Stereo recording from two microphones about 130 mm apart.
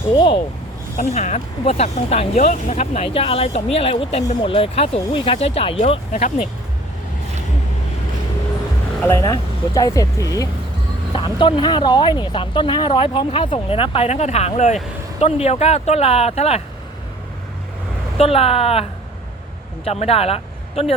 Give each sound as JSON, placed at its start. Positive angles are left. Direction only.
{"t": 0.1, "sound": "speech", "side_deg": 40}
{"t": 0.9, "sound": "speech", "side_deg": 65}
{"t": 9.0, "sound": "speech", "side_deg": 25}
{"t": 11.1, "sound": "speech", "side_deg": 40}
{"t": 18.2, "sound": "speech", "side_deg": 50}